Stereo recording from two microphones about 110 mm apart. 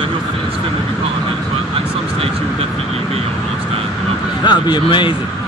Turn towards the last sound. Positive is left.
turn(degrees=45)  # may be behind; listen again after turning